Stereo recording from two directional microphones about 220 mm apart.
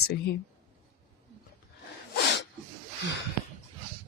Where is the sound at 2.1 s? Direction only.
50° left (ahead or behind).